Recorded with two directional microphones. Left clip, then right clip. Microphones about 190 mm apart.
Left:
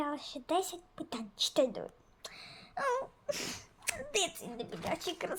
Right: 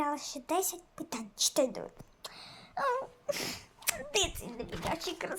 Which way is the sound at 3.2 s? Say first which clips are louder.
Right 2 dB; 10° right (ahead or behind).